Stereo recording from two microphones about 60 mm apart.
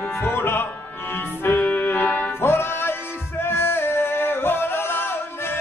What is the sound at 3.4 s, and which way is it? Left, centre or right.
Singing, left.